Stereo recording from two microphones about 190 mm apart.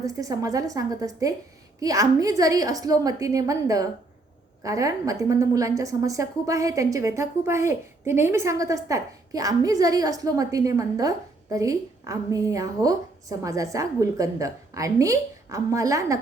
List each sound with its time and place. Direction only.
0.0 s a woman's voice: 20° right (ahead or behind)